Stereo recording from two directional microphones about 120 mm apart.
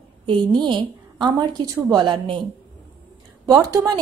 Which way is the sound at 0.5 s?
40° right (ahead or behind).